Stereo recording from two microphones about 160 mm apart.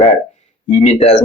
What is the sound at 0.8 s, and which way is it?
Speech, 40° left (ahead or behind).